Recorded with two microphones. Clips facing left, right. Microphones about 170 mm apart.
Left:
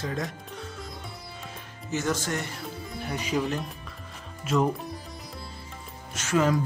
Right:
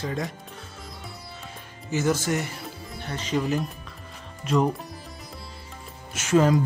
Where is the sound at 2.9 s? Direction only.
Centre (ahead or behind).